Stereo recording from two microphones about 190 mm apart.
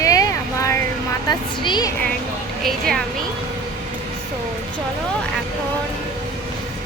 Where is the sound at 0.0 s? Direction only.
15° left (ahead or behind).